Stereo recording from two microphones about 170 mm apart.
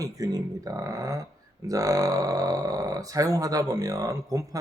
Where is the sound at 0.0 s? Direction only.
20° right (ahead or behind).